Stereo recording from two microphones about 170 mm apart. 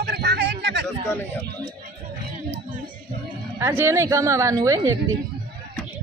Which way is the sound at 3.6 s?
15° right (ahead or behind).